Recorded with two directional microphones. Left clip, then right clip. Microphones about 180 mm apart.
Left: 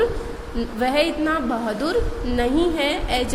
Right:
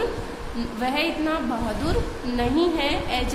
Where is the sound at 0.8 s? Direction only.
30° left (ahead or behind).